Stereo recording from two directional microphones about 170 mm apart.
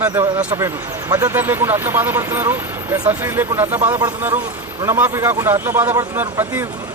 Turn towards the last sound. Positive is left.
turn(degrees=-10)  # may be behind; listen again after turning